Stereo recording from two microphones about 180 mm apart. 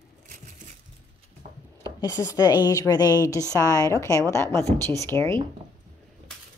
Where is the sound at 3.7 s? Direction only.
20° left (ahead or behind).